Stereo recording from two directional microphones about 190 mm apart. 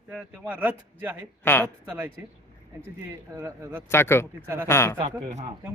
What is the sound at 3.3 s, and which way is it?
Speech, 10° right (ahead or behind).